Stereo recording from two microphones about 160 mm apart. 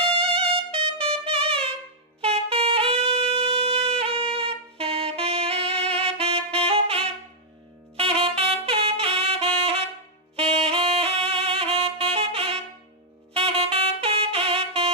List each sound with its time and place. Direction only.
0.2 s music: 35° right (ahead or behind)
2.2 s saxophone: 35° right (ahead or behind)